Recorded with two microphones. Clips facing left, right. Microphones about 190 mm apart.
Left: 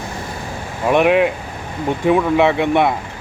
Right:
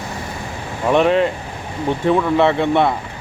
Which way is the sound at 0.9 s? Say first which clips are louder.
Left 1 dB; 10° left (ahead or behind).